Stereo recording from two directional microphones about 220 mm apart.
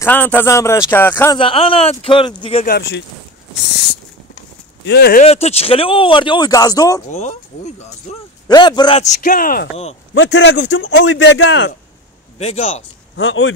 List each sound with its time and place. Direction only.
0.0 s speech: 10° left (ahead or behind)
1.4 s speech: 25° left (ahead or behind)
2.6 s speech: 45° left (ahead or behind)
5.2 s speech: 30° left (ahead or behind)
7.1 s speech: 30° left (ahead or behind)
8.5 s speech: 20° left (ahead or behind)
10.1 s speech: 55° left (ahead or behind)
12.4 s speech: 30° left (ahead or behind)
13.1 s speech: 60° left (ahead or behind)